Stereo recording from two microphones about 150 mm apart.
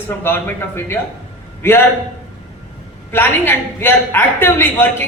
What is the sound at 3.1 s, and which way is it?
Speech, 15° left (ahead or behind).